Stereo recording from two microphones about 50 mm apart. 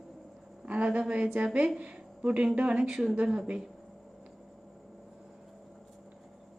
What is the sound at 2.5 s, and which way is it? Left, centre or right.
Speech, right.